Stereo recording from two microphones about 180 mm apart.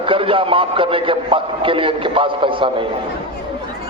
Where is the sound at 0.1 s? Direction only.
30° right (ahead or behind).